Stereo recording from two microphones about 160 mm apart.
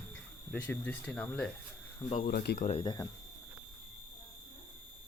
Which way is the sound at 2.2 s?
90° left.